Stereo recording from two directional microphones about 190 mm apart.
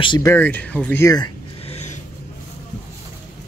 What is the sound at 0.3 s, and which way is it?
A man's voice, 10° left (ahead or behind).